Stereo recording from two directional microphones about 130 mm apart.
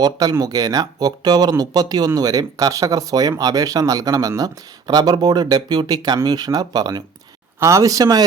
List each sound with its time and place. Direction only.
0.0 s speech: 30° right (ahead or behind)